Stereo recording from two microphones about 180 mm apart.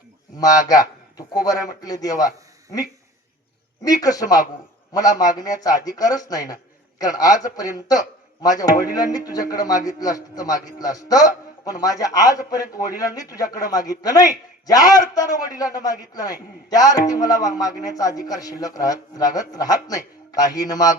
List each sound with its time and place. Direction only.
0.3 s a man's voice: 20° left (ahead or behind)
3.8 s a man's voice: 20° left (ahead or behind)